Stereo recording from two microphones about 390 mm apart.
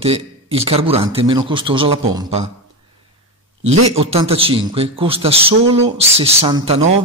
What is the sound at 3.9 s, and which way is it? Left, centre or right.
A man's voice, centre.